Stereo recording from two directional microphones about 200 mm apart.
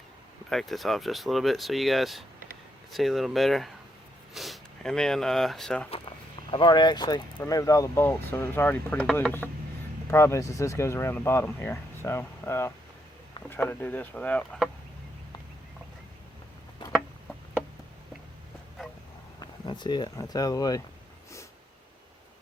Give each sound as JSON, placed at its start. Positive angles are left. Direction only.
{"t": 0.5, "sound": "speech", "side_deg": 0}
{"t": 6.5, "sound": "speech", "side_deg": 25}
{"t": 16.9, "sound": "a sound", "side_deg": 0}
{"t": 19.4, "sound": "speech", "side_deg": 20}